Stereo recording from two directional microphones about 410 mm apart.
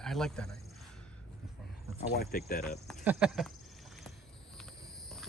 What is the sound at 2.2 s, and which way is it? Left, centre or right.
Speech, left.